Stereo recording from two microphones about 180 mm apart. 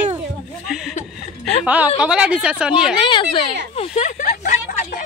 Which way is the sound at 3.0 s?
30° left (ahead or behind).